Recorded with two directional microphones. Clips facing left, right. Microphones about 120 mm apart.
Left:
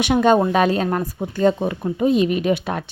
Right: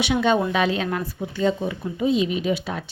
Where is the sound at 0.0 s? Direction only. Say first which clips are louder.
Left 5 dB; 45° left (ahead or behind).